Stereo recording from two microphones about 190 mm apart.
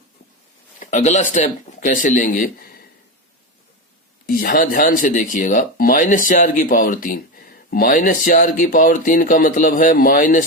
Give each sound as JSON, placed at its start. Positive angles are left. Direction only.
{"t": 0.8, "sound": "speech", "side_deg": 40}
{"t": 4.3, "sound": "speech", "side_deg": 50}